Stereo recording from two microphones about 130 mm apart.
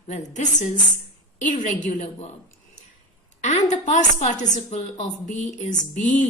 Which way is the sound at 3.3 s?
60° left (ahead or behind).